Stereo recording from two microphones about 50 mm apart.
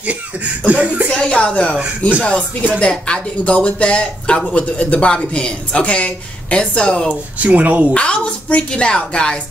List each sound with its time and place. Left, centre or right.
0.0 s laughter: right
0.7 s speech: right
1.1 s speech: left
7.3 s speech: right
7.9 s speech: left